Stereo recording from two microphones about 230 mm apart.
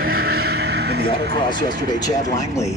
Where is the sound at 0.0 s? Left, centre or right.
Right.